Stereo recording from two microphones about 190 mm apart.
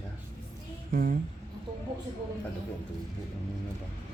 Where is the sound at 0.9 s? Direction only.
45° right (ahead or behind).